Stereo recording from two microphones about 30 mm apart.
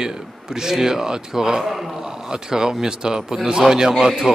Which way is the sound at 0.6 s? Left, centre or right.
Centre.